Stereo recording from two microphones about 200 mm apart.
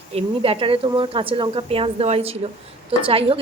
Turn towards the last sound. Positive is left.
turn(degrees=-25)  # may be behind; listen again after turning